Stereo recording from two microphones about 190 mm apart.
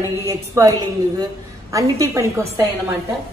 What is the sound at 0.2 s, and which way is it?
Speech, 15° right (ahead or behind).